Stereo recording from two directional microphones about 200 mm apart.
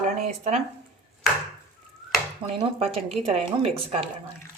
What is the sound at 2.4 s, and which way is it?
Speech, 25° right (ahead or behind).